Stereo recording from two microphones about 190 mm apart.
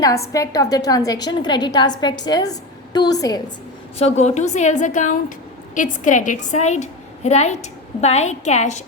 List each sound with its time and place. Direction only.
0.0 s a woman's voice: 15° left (ahead or behind)
3.9 s a woman's voice: 35° left (ahead or behind)